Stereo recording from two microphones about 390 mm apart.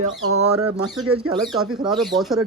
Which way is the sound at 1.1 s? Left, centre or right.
Right.